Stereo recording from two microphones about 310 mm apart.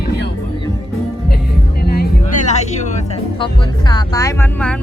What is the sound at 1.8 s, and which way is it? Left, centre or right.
Music, left.